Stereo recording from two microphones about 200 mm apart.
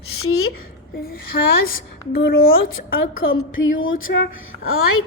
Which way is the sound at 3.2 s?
85° left.